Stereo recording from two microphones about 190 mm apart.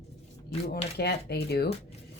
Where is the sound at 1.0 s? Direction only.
60° left (ahead or behind).